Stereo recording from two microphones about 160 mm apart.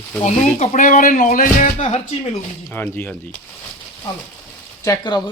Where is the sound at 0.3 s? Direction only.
50° left (ahead or behind).